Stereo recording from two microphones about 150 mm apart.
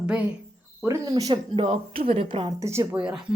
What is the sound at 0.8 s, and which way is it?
Cricket, 20° right (ahead or behind).